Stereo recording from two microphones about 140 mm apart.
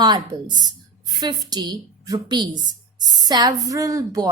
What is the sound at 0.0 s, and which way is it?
A woman's voice, 30° right (ahead or behind).